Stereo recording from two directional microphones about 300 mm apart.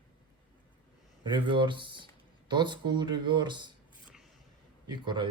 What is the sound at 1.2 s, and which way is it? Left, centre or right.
Speech, centre.